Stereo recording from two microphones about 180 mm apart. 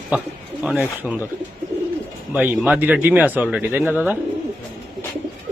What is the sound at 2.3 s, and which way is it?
A man's voice, 10° right (ahead or behind).